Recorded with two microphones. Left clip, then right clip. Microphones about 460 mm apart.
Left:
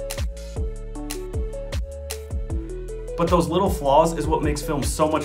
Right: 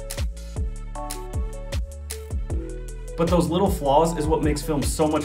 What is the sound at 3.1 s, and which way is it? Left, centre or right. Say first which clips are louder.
Speech: left 2 dB; centre.